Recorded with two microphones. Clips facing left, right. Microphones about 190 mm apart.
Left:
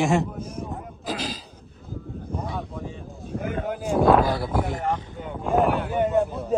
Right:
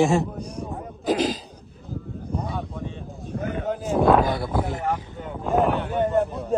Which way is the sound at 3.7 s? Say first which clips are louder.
Even; centre (ahead or behind).